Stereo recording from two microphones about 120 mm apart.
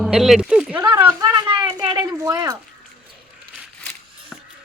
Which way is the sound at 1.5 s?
40° right (ahead or behind).